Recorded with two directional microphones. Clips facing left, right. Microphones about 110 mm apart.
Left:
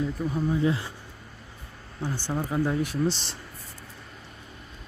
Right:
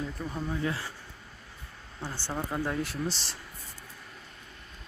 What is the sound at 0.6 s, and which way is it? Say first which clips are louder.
Speech: left 7 dB; 20° left (ahead or behind).